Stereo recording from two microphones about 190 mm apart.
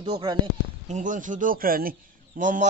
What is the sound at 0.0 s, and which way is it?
Speech, 25° right (ahead or behind).